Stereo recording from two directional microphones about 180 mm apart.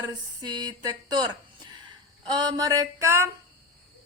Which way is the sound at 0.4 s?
25° right (ahead or behind).